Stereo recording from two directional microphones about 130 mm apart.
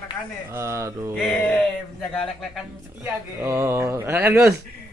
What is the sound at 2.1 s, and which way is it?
Speech, centre (ahead or behind).